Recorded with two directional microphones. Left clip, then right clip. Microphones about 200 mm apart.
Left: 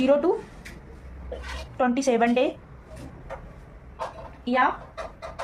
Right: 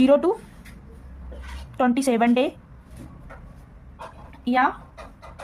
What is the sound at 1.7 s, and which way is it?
Speech, 45° right (ahead or behind).